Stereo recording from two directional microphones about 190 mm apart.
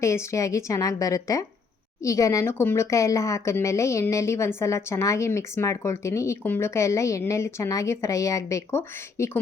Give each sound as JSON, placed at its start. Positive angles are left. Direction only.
{"t": 0.0, "sound": "speech", "side_deg": 15}